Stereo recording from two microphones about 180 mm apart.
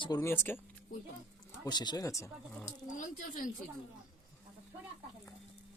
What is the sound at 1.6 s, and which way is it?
Speech, 25° left (ahead or behind).